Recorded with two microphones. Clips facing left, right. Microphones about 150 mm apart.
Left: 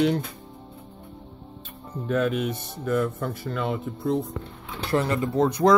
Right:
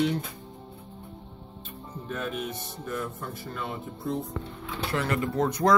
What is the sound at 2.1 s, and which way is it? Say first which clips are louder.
Speech: left 9 dB; 90° left.